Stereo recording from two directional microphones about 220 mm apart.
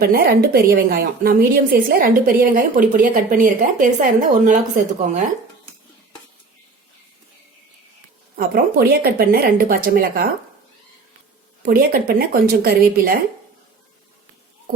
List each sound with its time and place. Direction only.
0.0 s a woman's voice: 45° right (ahead or behind)
8.4 s speech: 40° right (ahead or behind)
11.6 s a woman's voice: 40° right (ahead or behind)